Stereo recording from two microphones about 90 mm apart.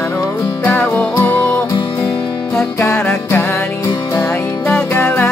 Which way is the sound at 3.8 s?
35° left (ahead or behind).